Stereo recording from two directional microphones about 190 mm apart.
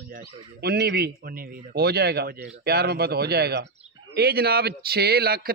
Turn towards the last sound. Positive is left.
turn(degrees=-55)  # may be behind; listen again after turning